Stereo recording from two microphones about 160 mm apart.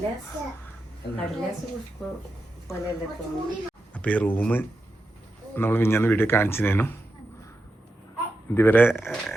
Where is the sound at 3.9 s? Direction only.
10° left (ahead or behind).